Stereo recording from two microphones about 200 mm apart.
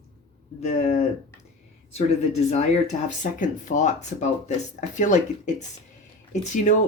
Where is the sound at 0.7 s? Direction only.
35° left (ahead or behind).